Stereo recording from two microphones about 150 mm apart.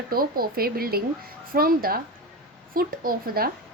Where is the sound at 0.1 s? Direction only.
80° right.